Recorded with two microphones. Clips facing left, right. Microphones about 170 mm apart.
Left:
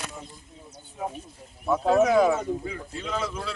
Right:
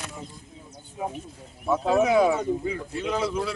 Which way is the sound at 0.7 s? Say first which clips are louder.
Right 1 dB; 20° right (ahead or behind).